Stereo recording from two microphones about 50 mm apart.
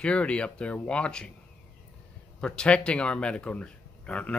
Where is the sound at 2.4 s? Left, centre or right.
Centre.